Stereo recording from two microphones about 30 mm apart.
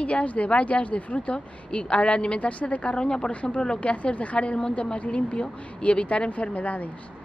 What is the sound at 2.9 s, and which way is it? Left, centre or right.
Speech, left.